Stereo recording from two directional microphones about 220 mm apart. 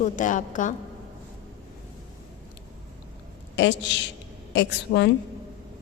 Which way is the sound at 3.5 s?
55° left (ahead or behind).